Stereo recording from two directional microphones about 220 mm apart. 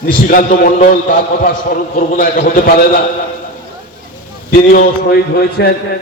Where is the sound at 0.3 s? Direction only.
40° left (ahead or behind).